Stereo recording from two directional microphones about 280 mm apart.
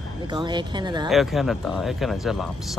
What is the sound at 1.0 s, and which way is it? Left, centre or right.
Speech, centre.